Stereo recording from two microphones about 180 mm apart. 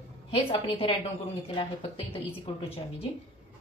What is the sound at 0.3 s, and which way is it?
A woman's voice, 30° left (ahead or behind).